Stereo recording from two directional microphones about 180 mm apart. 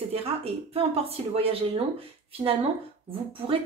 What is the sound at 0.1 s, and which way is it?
A woman's voice, 35° right (ahead or behind).